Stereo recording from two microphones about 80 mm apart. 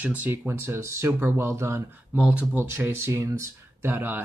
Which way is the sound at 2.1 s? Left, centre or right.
Centre.